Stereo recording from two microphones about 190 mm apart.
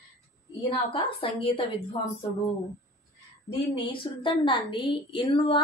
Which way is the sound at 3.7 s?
25° left (ahead or behind).